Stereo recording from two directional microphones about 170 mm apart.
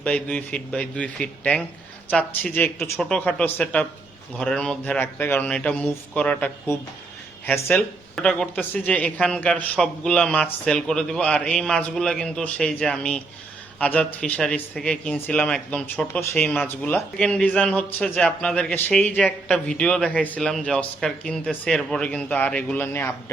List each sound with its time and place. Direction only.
0.0 s a man's voice: 10° left (ahead or behind)